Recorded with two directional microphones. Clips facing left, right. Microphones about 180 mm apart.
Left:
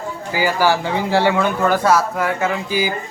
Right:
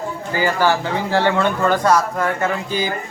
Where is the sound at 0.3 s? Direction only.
10° left (ahead or behind).